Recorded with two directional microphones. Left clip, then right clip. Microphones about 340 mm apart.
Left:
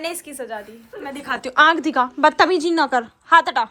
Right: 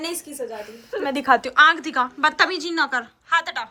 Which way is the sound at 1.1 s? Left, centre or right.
Centre.